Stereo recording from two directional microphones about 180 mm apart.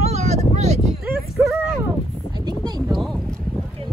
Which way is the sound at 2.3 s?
25° right (ahead or behind).